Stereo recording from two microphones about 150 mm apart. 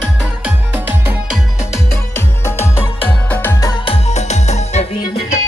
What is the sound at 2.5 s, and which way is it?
Music, 15° left (ahead or behind).